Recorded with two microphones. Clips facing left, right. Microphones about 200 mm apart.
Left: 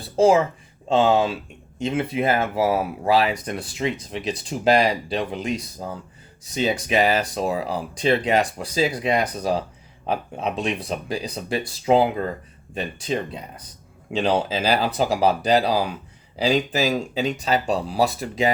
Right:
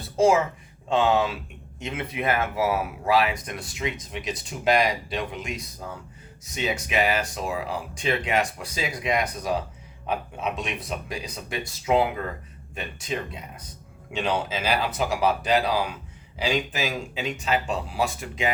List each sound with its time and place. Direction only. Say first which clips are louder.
0.2 s speech: left 3 dB; 30° left (ahead or behind)